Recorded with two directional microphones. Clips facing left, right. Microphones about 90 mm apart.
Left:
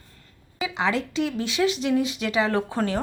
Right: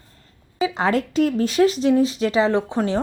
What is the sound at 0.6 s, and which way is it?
Speech, 40° right (ahead or behind).